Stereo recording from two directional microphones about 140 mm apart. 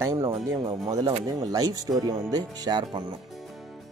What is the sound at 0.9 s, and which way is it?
Speech, 50° right (ahead or behind).